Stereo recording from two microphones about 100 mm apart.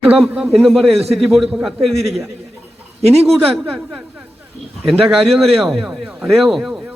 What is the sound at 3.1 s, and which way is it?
Speech, 90° right.